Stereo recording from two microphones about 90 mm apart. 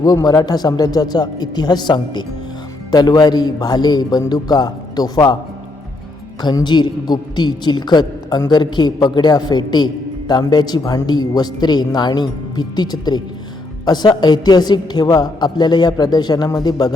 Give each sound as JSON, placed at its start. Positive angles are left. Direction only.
{"t": 0.0, "sound": "a woman's voice", "side_deg": 45}
{"t": 6.4, "sound": "a woman's voice", "side_deg": 55}